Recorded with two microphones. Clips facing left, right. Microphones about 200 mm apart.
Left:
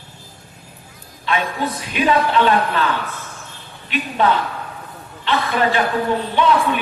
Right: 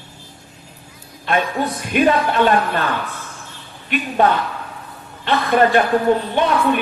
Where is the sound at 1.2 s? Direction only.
50° right (ahead or behind).